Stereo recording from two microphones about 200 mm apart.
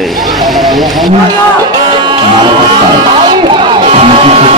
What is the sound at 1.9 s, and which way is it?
Music, 20° right (ahead or behind).